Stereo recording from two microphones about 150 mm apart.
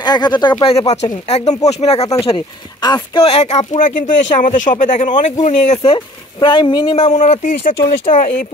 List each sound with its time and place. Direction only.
0.0 s speech: 30° left (ahead or behind)
1.2 s speech: 45° left (ahead or behind)
2.2 s speech: 30° left (ahead or behind)
3.3 s speech: 45° left (ahead or behind)
7.0 s speech: 50° left (ahead or behind)